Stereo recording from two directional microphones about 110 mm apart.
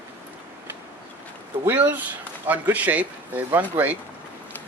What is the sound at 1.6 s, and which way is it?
Speech, 20° right (ahead or behind).